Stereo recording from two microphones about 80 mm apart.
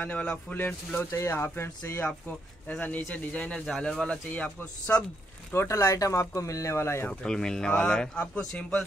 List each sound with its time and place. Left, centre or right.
0.0 s speech: centre
1.1 s speech: left; by 3.7 s centre
3.7 s speech: centre
4.3 s speech: left
5.5 s speech: left
7.1 s speech: centre